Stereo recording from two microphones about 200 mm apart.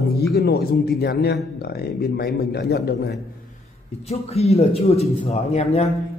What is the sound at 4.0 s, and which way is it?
A man's voice, 30° left (ahead or behind).